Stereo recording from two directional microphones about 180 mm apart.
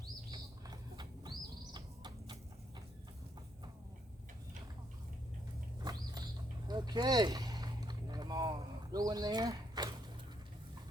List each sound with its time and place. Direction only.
0.3 s bird: 20° right (ahead or behind)
5.8 s a sound: 20° right (ahead or behind)
6.7 s boat: 25° right (ahead or behind)